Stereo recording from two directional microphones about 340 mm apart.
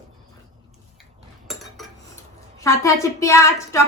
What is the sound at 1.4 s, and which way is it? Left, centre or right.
Speech, centre.